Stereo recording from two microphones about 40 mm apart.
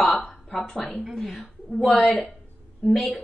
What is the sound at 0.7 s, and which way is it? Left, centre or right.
Speech, left.